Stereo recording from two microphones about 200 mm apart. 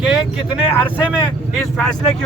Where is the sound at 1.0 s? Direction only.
5° right (ahead or behind).